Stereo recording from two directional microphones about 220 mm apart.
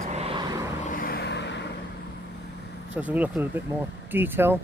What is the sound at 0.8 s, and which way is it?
Vehicle, 40° left (ahead or behind).